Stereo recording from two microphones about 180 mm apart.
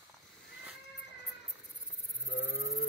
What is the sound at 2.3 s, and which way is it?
Wild animals, 75° left (ahead or behind).